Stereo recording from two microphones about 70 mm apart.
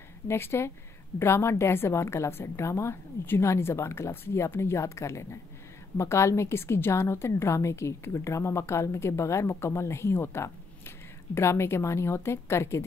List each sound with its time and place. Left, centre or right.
0.3 s a woman's voice: left